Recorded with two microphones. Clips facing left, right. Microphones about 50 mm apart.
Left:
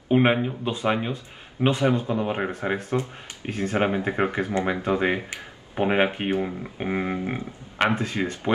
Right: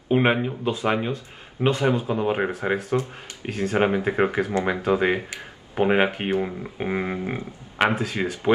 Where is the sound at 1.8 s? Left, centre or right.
Right.